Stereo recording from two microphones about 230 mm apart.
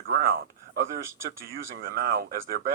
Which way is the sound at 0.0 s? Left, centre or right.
Right.